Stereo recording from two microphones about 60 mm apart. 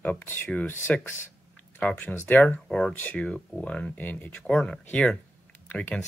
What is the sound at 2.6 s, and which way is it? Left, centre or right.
Speech, centre.